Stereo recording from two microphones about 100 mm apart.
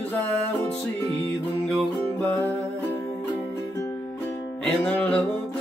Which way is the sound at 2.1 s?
15° left (ahead or behind).